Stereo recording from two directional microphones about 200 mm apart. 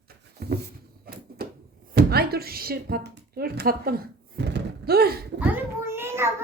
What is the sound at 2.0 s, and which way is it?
Speech, 50° right (ahead or behind).